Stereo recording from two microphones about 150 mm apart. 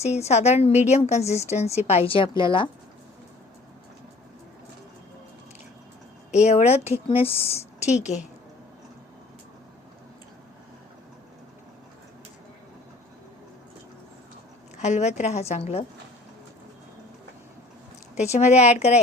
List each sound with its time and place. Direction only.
0.0 s speech: 45° left (ahead or behind)
6.3 s speech: 45° left (ahead or behind)
14.8 s speech: 50° left (ahead or behind)
18.1 s speech: 50° left (ahead or behind)